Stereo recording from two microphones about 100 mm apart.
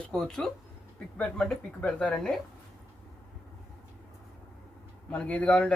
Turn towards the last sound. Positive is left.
turn(degrees=15)  # may be behind; listen again after turning